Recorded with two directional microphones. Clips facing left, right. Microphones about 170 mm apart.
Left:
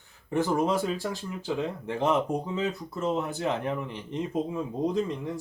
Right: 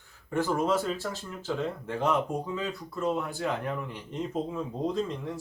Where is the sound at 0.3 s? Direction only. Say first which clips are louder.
Left 1 dB; 15° left (ahead or behind).